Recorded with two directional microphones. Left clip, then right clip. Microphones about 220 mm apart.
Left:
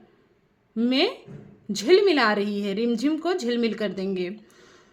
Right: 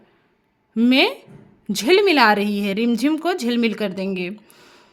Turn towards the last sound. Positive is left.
turn(degrees=-30)  # may be behind; listen again after turning